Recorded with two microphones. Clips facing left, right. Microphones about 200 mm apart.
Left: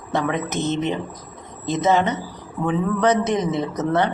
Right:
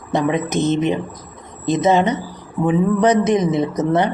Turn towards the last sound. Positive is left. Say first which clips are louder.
# right 3 dB
turn(degrees=-15)  # may be behind; listen again after turning